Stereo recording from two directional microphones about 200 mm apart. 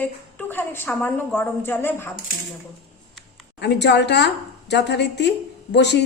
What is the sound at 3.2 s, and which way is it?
A woman's voice, 60° left (ahead or behind).